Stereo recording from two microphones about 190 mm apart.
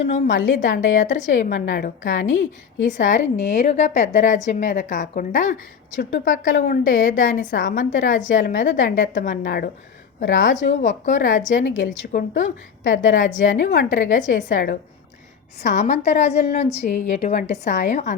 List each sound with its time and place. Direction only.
0.0 s a woman's voice: 40° left (ahead or behind)
13.1 s a woman's voice: 45° left (ahead or behind)
13.5 s a woman's voice: 70° left (ahead or behind)
13.9 s a woman's voice: 45° left (ahead or behind)